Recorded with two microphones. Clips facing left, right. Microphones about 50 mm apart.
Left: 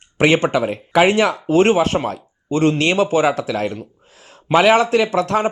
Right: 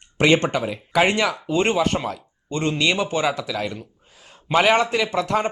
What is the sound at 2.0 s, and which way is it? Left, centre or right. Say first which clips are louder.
Speech: left 5 dB; left.